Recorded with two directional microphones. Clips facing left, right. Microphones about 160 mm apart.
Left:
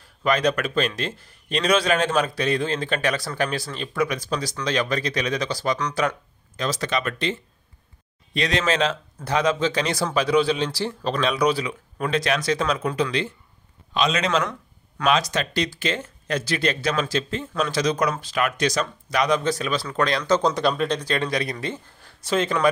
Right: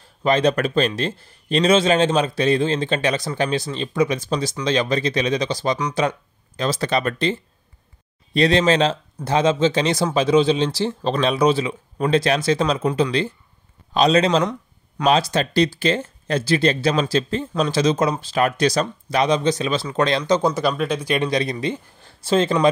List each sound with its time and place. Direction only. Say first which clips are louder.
0.2 s a man's voice: right 4 dB; 25° right (ahead or behind)
14.4 s a sound: right 5 dB; 20° right (ahead or behind)
15.0 s speech: right 4 dB; 30° right (ahead or behind)
20.3 s speech: right 1 dB; 5° right (ahead or behind); by 22.7 s 30° right (ahead or behind)